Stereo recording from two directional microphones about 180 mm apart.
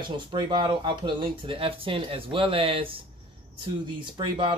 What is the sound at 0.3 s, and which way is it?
Speech, 25° right (ahead or behind).